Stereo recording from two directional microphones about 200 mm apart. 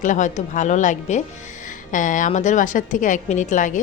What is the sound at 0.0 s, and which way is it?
A woman's voice, 40° left (ahead or behind).